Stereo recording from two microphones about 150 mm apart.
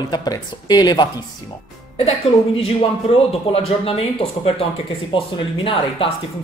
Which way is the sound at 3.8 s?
40° left (ahead or behind).